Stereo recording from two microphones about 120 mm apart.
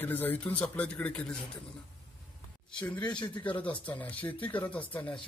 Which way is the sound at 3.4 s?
10° left (ahead or behind).